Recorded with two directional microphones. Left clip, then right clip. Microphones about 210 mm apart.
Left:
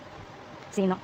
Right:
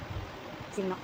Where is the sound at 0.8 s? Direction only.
50° left (ahead or behind).